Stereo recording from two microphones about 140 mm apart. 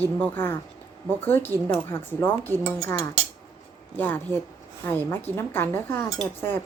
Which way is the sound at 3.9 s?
15° left (ahead or behind).